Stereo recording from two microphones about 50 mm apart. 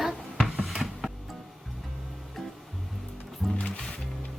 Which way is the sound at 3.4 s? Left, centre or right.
Centre.